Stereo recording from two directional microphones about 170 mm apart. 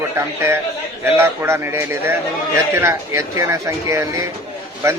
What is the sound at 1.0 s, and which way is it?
Speech, 15° right (ahead or behind).